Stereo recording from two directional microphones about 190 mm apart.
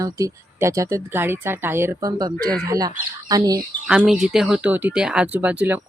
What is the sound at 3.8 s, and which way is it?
Speech, 5° right (ahead or behind).